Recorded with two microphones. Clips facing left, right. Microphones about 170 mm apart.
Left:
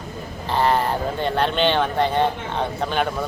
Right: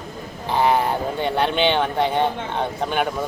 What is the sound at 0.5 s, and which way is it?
Speech, 10° right (ahead or behind).